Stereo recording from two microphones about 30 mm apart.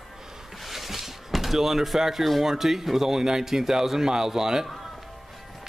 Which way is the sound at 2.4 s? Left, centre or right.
Centre.